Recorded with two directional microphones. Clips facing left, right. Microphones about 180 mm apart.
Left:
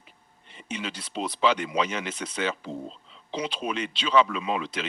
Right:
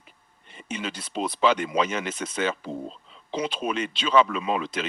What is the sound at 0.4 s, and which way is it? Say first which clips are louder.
Speech: right 2 dB; 50° right (ahead or behind).